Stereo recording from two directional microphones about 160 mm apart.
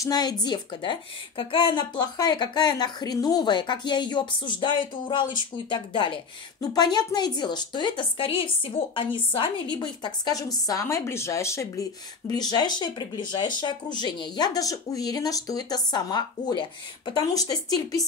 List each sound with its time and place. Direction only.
0.0 s speech: 25° left (ahead or behind)